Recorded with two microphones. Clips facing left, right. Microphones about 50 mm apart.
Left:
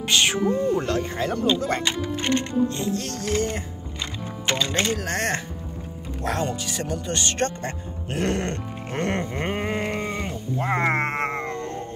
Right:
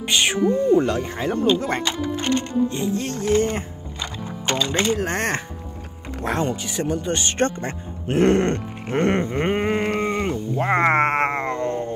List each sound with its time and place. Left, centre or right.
0.1 s speech: centre
1.2 s speech: right
2.7 s speech: centre
4.6 s speech: right
9.8 s a sound: right